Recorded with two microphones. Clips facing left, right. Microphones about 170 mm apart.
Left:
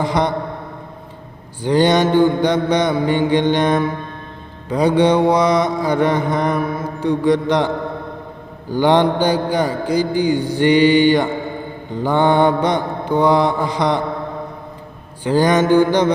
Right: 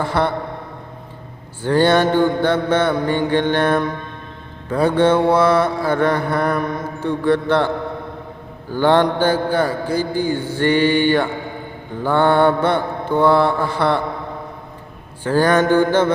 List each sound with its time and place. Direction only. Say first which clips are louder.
0.0 s mantra: left 1 dB; 15° left (ahead or behind)
1.6 s mantra: even; 15° left (ahead or behind)
8.7 s mantra: left 1 dB; 15° left (ahead or behind)
15.2 s mantra: left 1 dB; 15° left (ahead or behind)